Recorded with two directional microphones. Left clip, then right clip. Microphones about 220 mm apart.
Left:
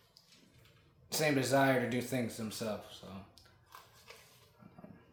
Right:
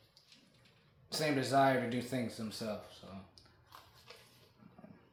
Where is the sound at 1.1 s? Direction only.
20° left (ahead or behind).